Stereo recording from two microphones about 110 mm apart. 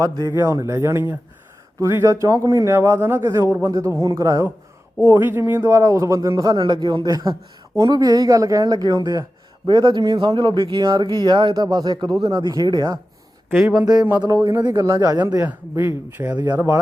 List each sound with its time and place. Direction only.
0.0 s a man's voice: 35° right (ahead or behind)
13.5 s speech: 15° right (ahead or behind)
14.2 s speech: 30° right (ahead or behind)
15.7 s speech: 25° right (ahead or behind)